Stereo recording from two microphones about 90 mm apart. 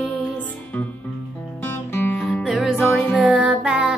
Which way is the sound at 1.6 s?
25° left (ahead or behind).